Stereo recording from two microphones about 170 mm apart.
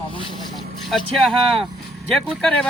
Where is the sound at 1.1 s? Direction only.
Centre (ahead or behind).